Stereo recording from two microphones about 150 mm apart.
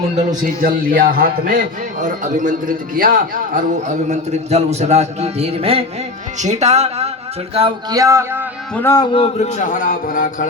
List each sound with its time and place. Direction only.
0.6 s a man's voice: 75° right (ahead or behind); by 7.1 s 45° right (ahead or behind)
7.9 s speech: 20° right (ahead or behind)
8.7 s a man's voice: 15° left (ahead or behind)
9.0 s speech: 35° left (ahead or behind); by 10.5 s 65° left (ahead or behind)